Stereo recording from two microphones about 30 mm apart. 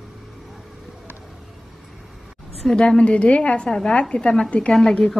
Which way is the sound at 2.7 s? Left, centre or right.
Left.